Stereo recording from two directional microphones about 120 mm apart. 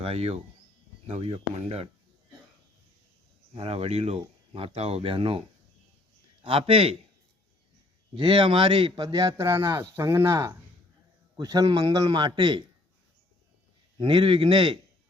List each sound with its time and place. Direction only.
0.0 s speech: 60° right (ahead or behind)
3.5 s speech: 55° right (ahead or behind)
6.4 s speech: 50° right (ahead or behind)
8.1 s a man's voice: 45° right (ahead or behind); by 10.5 s 20° right (ahead or behind)
11.3 s a man's voice: 35° right (ahead or behind)
14.0 s speech: 45° right (ahead or behind)